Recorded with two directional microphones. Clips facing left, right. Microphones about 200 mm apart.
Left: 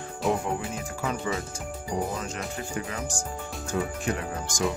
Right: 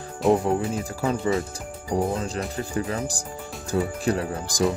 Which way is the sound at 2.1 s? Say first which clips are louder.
Right 5 dB; 35° right (ahead or behind).